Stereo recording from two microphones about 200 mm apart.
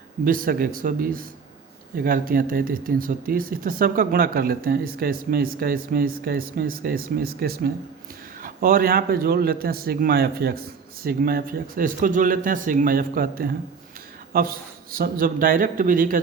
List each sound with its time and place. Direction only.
0.3 s speech: 45° right (ahead or behind)